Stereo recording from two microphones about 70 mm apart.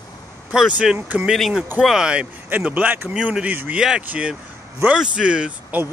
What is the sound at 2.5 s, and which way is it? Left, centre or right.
Speech, right.